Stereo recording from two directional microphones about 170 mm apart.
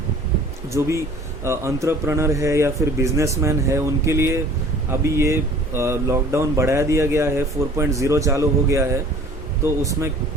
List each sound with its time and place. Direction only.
0.7 s speech: 15° right (ahead or behind)